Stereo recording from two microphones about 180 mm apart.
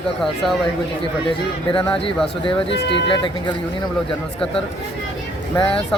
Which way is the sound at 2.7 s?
75° left (ahead or behind).